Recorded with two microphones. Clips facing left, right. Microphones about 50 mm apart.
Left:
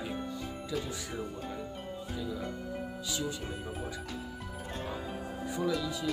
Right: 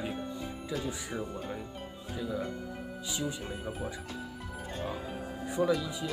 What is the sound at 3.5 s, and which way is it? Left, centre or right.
Speech, centre.